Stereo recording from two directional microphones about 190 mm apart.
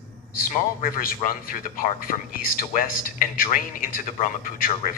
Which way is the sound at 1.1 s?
50° left (ahead or behind).